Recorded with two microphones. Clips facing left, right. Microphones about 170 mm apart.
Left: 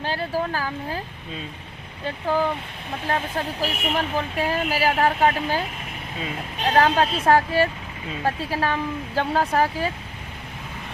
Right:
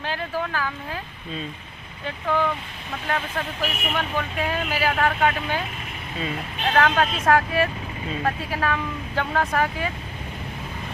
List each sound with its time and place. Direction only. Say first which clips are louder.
0.0 s speech: left 2 dB; 35° left (ahead or behind)
2.0 s speech: left 1 dB; 30° left (ahead or behind)